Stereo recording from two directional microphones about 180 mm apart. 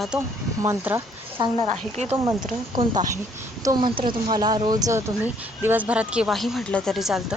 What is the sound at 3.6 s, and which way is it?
Speech, 20° right (ahead or behind).